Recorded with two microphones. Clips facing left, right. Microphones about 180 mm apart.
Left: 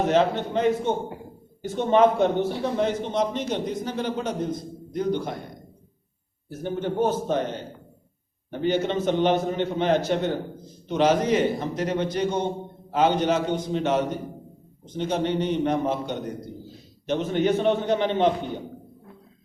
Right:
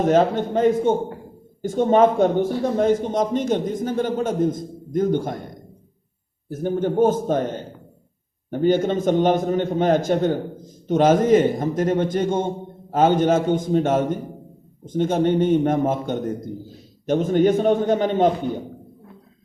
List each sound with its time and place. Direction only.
0.0 s a man's voice: 45° right (ahead or behind)
6.5 s a man's voice: 45° right (ahead or behind)